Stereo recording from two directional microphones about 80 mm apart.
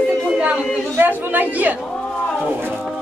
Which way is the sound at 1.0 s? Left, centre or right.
Right.